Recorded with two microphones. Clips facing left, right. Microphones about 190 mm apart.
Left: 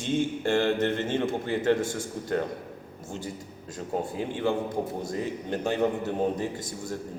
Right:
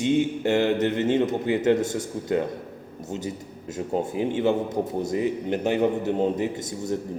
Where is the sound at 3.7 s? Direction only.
20° right (ahead or behind).